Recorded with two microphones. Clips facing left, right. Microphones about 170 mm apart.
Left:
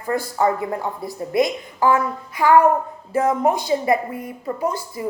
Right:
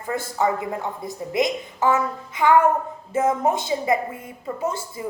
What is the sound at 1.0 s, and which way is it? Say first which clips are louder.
A woman's voice: left 3 dB; 20° right (ahead or behind).